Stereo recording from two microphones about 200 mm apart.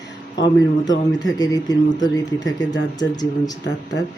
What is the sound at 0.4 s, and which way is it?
Speech, 20° left (ahead or behind).